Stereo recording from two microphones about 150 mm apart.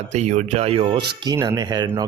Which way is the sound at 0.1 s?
50° right (ahead or behind).